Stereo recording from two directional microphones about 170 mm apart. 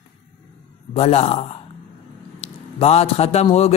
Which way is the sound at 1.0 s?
35° left (ahead or behind).